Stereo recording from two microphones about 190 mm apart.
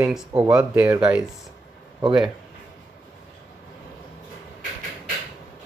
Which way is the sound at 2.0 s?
25° right (ahead or behind).